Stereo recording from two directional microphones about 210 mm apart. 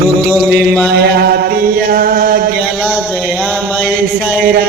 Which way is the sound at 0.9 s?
50° right (ahead or behind).